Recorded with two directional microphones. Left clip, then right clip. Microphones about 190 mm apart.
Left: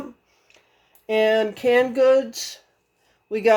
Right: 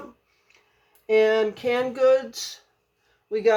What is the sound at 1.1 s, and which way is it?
Speech, 45° left (ahead or behind).